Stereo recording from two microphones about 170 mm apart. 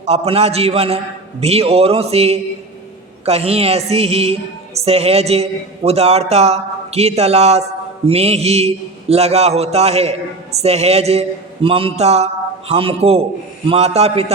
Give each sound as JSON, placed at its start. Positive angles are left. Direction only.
{"t": 0.0, "sound": "a man's voice", "side_deg": -40}